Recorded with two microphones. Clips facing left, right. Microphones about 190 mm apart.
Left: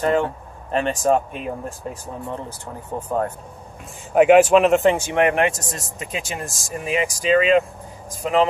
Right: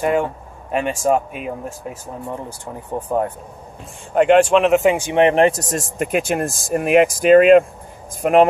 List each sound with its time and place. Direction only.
0.0 s speech: 10° right (ahead or behind)
2.6 s speech: 15° right (ahead or behind)
4.1 s speech: 5° left (ahead or behind)
4.9 s speech: 15° right (ahead or behind)
5.2 s speech: 30° right (ahead or behind); by 8.5 s 55° right (ahead or behind)